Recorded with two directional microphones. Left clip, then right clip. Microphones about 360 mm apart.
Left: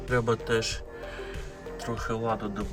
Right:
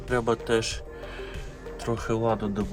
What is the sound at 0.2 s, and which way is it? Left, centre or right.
Speech, centre.